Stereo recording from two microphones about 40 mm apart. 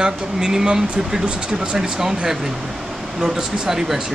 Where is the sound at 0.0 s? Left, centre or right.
Centre.